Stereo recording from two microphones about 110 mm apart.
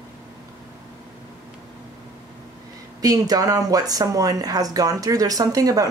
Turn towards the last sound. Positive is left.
turn(degrees=-35)  # may be behind; listen again after turning